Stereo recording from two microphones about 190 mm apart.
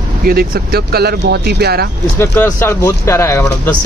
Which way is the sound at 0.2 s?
50° right (ahead or behind).